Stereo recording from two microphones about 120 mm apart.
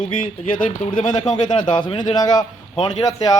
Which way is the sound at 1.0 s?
75° left (ahead or behind).